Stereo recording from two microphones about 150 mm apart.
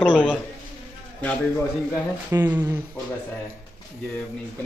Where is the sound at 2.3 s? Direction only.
25° right (ahead or behind).